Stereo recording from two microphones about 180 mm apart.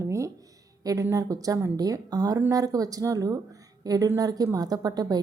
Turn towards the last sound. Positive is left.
turn(degrees=-20)  # may be behind; listen again after turning